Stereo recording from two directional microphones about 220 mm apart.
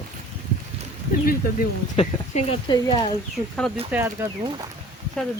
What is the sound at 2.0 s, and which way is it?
Speech, 25° left (ahead or behind).